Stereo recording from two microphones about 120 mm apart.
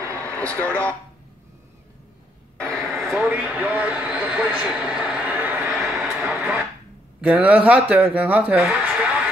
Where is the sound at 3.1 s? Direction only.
15° right (ahead or behind).